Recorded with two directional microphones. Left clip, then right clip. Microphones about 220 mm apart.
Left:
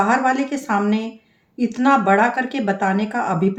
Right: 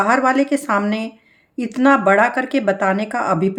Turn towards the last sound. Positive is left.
turn(degrees=-50)  # may be behind; listen again after turning